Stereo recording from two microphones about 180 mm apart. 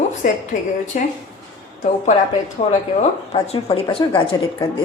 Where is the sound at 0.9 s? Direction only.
45° left (ahead or behind).